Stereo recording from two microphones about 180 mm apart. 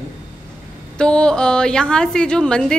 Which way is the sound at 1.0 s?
5° left (ahead or behind).